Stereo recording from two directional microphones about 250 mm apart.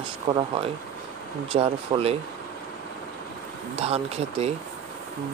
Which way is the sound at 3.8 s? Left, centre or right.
Right.